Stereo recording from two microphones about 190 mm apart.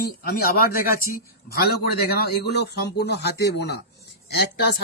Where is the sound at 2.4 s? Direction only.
60° left (ahead or behind).